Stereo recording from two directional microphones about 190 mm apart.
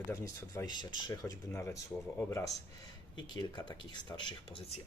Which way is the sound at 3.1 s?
20° left (ahead or behind).